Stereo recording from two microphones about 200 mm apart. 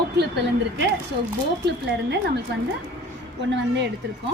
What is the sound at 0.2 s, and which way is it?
A woman's voice, 60° right (ahead or behind).